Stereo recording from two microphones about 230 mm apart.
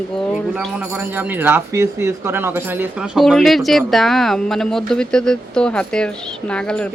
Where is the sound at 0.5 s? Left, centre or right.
Centre.